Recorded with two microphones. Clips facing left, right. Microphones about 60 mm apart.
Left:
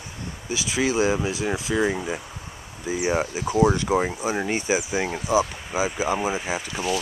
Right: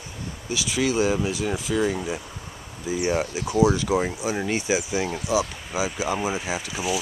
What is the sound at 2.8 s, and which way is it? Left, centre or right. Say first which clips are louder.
Speech: even; centre.